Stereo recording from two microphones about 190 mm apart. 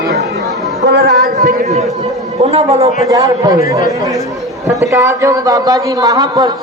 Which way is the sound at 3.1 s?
20° right (ahead or behind).